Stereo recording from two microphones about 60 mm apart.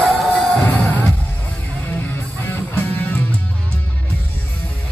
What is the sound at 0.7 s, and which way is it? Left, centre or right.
Music, left.